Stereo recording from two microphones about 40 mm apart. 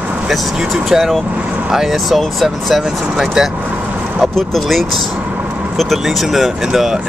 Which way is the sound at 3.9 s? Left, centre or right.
Right.